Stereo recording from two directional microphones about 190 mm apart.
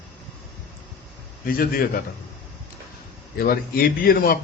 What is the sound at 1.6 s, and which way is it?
Speech, 50° left (ahead or behind).